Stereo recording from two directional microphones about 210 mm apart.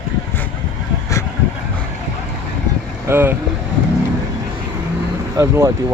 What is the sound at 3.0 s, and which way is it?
Speech, 10° right (ahead or behind).